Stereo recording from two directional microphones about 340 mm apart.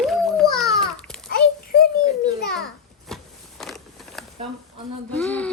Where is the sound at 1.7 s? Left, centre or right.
Left.